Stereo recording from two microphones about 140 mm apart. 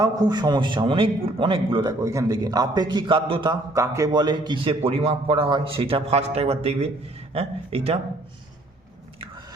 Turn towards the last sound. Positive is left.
turn(degrees=-45)  # may be behind; listen again after turning